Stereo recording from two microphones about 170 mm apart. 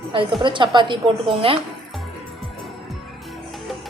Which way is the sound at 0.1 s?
30° right (ahead or behind).